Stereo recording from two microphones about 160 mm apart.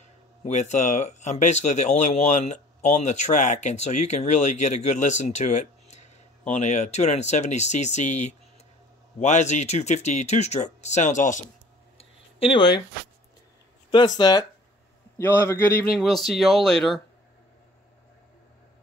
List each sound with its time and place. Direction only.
0.4 s speech: 45° left (ahead or behind)
12.0 s a sound: 35° left (ahead or behind)
13.9 s speech: 25° left (ahead or behind)
15.1 s a man's voice: 15° left (ahead or behind)
16.0 s speech: centre (ahead or behind)